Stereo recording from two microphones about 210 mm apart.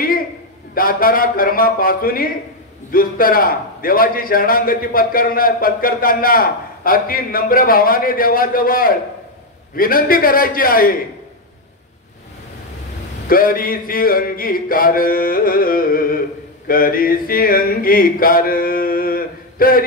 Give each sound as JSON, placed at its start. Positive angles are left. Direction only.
{"t": 0.7, "sound": "a man's voice", "side_deg": 45}
{"t": 13.3, "sound": "a man's voice", "side_deg": 40}